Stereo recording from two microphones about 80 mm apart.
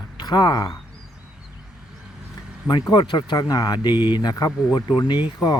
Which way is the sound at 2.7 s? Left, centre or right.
Left.